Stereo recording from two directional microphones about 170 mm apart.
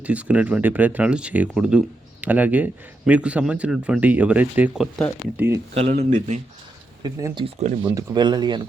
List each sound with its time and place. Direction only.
0.0 s a man's voice: 10° right (ahead or behind)
5.7 s speech: 35° right (ahead or behind)
7.0 s speech: 20° right (ahead or behind)
7.4 s speech: 45° right (ahead or behind)
7.9 s speech: 25° right (ahead or behind)